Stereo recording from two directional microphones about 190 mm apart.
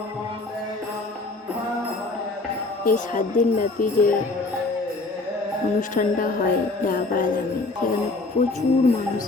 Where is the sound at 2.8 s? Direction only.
45° left (ahead or behind).